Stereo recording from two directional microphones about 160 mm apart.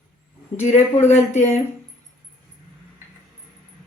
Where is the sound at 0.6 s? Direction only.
45° left (ahead or behind).